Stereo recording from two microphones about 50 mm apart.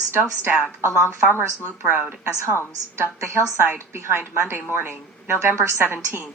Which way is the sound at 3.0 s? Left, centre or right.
Right.